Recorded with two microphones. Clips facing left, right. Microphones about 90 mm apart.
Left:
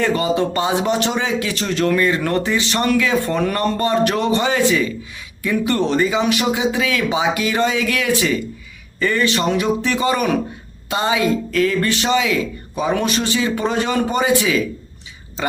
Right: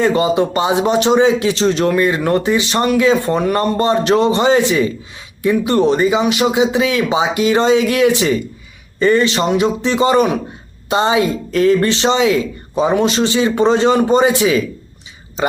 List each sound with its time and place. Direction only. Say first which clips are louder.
0.0 s speech: right 4 dB; 20° right (ahead or behind)